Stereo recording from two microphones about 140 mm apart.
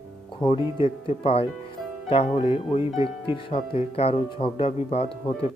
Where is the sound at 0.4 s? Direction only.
35° left (ahead or behind).